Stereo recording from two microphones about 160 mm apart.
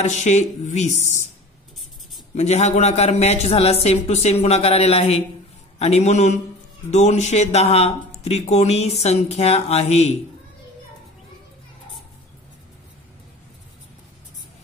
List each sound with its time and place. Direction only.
0.0 s speech: 45° left (ahead or behind)
2.3 s speech: 45° left (ahead or behind)